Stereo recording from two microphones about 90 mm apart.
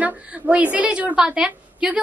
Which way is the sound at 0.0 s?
15° right (ahead or behind).